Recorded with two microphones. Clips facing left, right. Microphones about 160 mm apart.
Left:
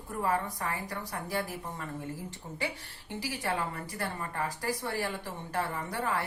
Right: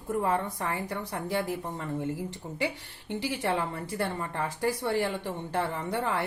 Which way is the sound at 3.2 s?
25° right (ahead or behind).